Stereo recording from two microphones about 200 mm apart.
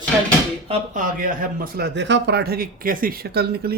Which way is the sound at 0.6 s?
35° right (ahead or behind).